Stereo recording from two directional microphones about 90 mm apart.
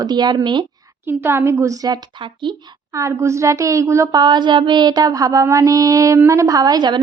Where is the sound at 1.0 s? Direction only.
25° right (ahead or behind); by 2.0 s 40° right (ahead or behind).